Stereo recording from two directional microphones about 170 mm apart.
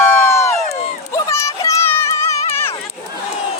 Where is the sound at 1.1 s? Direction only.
15° left (ahead or behind).